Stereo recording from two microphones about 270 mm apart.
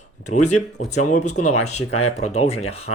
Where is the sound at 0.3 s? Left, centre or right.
Left.